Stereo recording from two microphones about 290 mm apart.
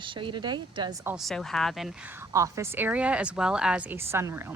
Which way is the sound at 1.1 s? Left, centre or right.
Centre.